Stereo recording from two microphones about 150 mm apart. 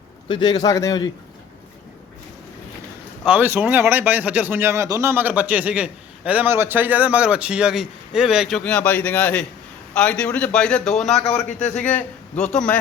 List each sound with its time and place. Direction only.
0.3 s a man's voice: 30° left (ahead or behind)
3.2 s speech: 15° right (ahead or behind); by 12.8 s 5° left (ahead or behind)